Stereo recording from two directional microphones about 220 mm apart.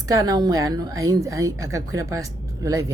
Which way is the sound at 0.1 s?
15° right (ahead or behind).